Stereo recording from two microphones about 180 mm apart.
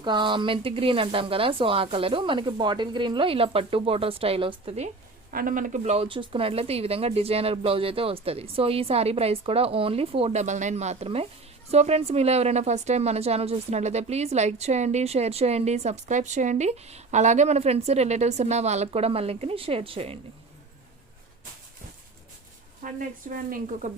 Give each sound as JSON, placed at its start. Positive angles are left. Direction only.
{"t": 0.0, "sound": "speech", "side_deg": -25}
{"t": 5.3, "sound": "a woman's voice", "side_deg": -50}
{"t": 22.8, "sound": "speech", "side_deg": -50}